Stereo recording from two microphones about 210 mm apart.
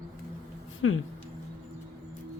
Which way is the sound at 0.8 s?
70° left (ahead or behind).